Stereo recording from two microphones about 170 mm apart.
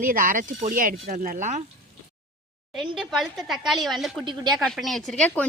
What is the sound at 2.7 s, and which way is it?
A woman's voice, centre (ahead or behind).